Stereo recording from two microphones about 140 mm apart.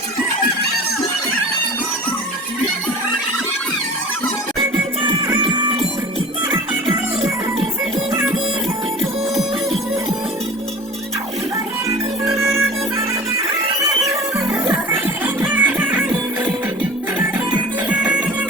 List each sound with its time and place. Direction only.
5.4 s music: 35° right (ahead or behind)
6.5 s music: 25° right (ahead or behind)
14.1 s music: 15° right (ahead or behind)
17.8 s music: 10° right (ahead or behind)